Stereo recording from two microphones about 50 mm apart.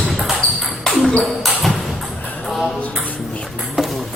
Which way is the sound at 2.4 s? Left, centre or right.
Centre.